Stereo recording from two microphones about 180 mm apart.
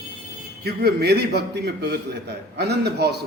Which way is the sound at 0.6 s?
60° right (ahead or behind).